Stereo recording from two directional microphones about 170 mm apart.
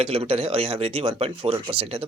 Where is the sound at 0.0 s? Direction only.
35° right (ahead or behind).